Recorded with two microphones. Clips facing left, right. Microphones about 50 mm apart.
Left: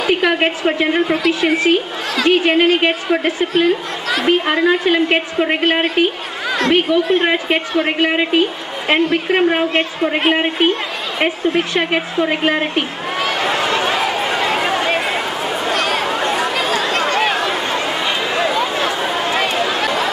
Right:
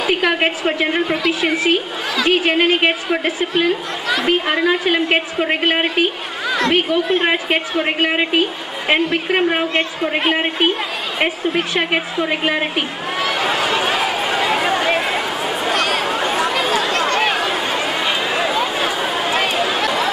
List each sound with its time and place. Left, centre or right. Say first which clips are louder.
0.0 s a woman's voice: left 2 dB; centre
6.5 s chatter: left 2 dB; centre
7.1 s a woman's voice: left 2 dB; centre
13.3 s chatter: left 1 dB; centre
16.9 s a sound: left 1 dB; centre